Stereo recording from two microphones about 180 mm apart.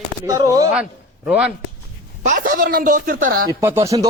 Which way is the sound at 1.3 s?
5° right (ahead or behind).